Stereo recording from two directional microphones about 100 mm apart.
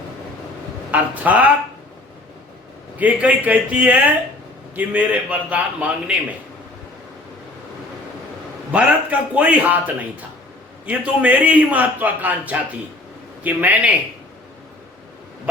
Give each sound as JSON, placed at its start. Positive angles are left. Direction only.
{"t": 0.9, "sound": "a man's voice", "side_deg": -15}
{"t": 3.0, "sound": "a man's voice", "side_deg": -15}
{"t": 8.7, "sound": "a man's voice", "side_deg": -15}